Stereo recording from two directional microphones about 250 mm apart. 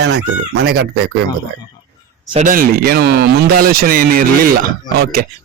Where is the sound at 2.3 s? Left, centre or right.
Right.